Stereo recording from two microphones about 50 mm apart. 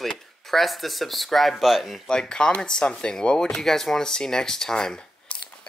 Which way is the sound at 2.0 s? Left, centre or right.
Centre.